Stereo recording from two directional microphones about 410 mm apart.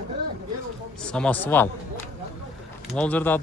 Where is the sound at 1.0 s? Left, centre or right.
Centre.